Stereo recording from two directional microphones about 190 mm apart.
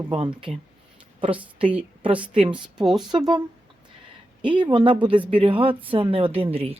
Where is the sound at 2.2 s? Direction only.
25° right (ahead or behind).